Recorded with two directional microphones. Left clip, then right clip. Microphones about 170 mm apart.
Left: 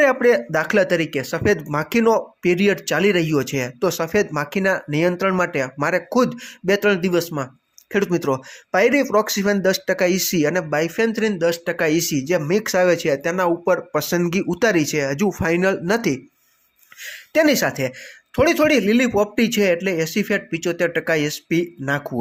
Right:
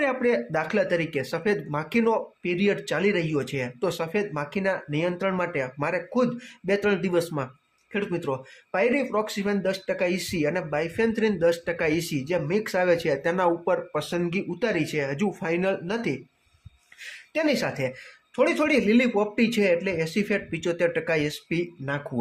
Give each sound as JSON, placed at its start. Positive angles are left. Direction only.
{"t": 0.0, "sound": "speech", "side_deg": 35}
{"t": 7.9, "sound": "speech", "side_deg": 40}
{"t": 14.2, "sound": "speech", "side_deg": 30}
{"t": 17.3, "sound": "speech", "side_deg": 35}